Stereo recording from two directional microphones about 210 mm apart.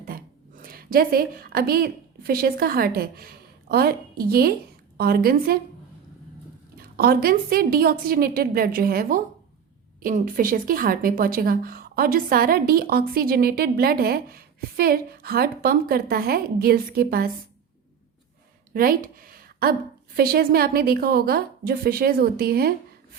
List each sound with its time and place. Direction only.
0.0 s a woman's voice: 40° right (ahead or behind)
6.7 s a woman's voice: 45° right (ahead or behind)
18.7 s a woman's voice: 45° right (ahead or behind)